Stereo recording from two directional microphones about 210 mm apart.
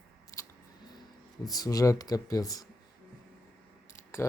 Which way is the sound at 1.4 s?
15° left (ahead or behind).